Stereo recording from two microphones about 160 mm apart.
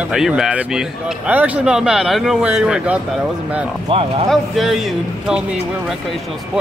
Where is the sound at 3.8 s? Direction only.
35° right (ahead or behind).